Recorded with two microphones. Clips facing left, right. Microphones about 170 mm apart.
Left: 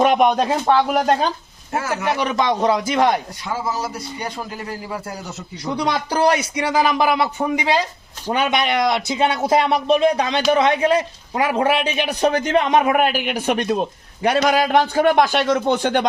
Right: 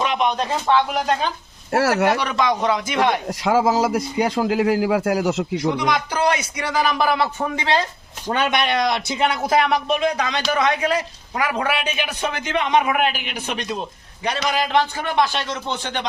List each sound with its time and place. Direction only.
0.0 s a man's voice: 50° left (ahead or behind)
1.7 s speech: 80° right
2.2 s a woman's voice: 30° left (ahead or behind)
3.4 s a man's voice: 90° right
5.9 s a woman's voice: 35° left (ahead or behind); by 16.0 s 50° left (ahead or behind)